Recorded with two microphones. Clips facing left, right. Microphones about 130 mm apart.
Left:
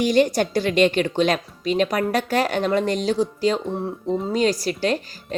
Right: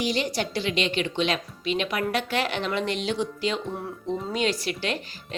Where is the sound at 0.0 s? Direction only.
50° left (ahead or behind).